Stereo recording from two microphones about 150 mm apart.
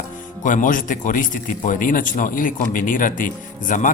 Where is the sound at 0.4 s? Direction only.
60° left (ahead or behind).